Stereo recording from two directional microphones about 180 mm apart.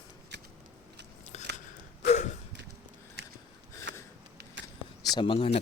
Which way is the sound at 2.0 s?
40° left (ahead or behind).